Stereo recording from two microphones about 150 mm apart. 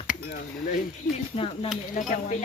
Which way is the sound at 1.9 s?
55° left (ahead or behind).